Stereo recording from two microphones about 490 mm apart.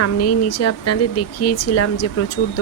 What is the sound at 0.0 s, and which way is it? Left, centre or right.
Speech, left.